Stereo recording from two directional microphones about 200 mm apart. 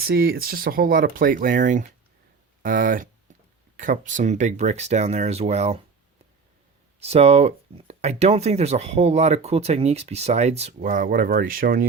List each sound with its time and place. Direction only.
0.1 s speech: 50° right (ahead or behind); by 5.8 s 30° right (ahead or behind)
7.0 s speech: 30° right (ahead or behind); by 11.9 s 45° right (ahead or behind)